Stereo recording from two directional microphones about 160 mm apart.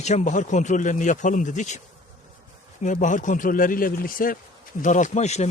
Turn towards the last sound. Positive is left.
turn(degrees=45)  # may be behind; listen again after turning